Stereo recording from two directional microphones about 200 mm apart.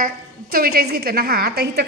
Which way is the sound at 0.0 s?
50° right (ahead or behind).